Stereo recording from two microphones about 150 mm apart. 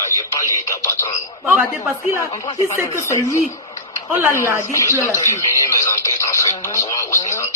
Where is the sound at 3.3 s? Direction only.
50° left (ahead or behind).